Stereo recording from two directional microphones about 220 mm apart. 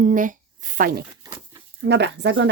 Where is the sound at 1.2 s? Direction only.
15° right (ahead or behind).